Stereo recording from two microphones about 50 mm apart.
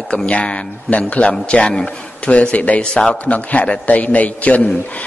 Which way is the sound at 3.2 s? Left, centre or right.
Left.